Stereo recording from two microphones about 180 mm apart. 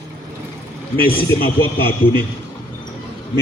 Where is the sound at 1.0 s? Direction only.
55° left (ahead or behind).